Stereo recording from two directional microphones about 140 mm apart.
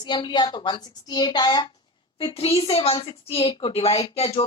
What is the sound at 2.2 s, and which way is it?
A woman's voice, 40° left (ahead or behind).